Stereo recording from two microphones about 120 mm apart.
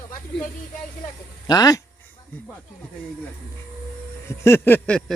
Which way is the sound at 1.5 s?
30° left (ahead or behind).